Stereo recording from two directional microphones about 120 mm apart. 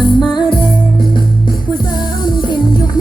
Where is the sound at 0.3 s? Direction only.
45° left (ahead or behind).